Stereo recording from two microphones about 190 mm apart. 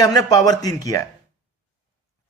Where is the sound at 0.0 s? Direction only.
20° left (ahead or behind).